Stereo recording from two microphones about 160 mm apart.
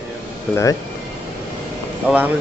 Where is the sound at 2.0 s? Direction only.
10° right (ahead or behind).